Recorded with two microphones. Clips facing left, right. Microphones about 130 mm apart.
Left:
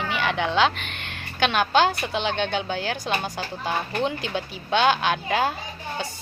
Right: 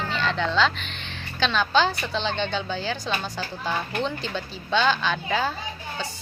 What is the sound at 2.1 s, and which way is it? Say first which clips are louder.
Speech: left 2 dB; 10° left (ahead or behind).